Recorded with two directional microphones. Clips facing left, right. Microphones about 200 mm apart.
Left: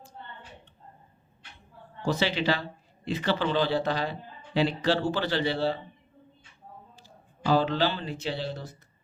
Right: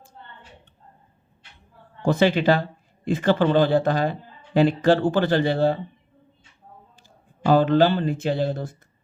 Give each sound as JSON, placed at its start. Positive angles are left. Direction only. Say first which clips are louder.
{"t": 2.0, "sound": "speech", "louder": "right 8 dB", "side_deg": -55}
{"t": 7.4, "sound": "speech", "louder": "right 7 dB", "side_deg": -50}